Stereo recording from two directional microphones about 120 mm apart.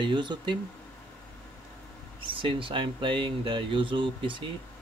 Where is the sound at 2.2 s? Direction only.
45° right (ahead or behind).